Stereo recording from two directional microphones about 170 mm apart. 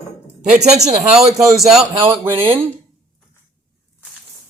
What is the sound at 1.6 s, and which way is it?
Speech, centre (ahead or behind).